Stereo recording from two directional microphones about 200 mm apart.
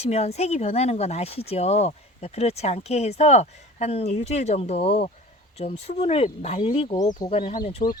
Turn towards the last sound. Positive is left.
turn(degrees=45)  # may be behind; listen again after turning